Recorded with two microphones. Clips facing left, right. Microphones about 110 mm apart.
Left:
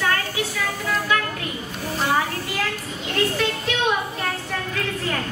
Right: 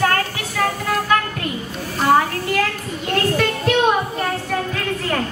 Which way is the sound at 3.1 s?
50° right (ahead or behind).